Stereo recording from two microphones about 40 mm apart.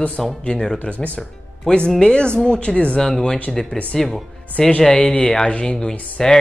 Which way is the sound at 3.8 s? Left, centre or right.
Left.